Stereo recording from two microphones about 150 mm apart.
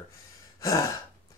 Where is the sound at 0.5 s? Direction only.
20° left (ahead or behind).